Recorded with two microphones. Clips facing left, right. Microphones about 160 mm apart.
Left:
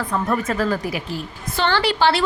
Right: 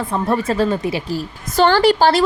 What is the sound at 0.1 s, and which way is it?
A woman's voice, 30° right (ahead or behind).